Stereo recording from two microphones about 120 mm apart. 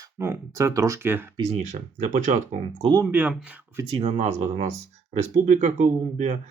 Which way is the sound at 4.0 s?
65° right (ahead or behind).